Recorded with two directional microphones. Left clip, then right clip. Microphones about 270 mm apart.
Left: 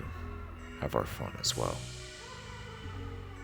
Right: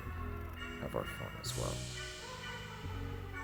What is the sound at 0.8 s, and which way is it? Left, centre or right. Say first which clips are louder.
Speech: left 8 dB; left.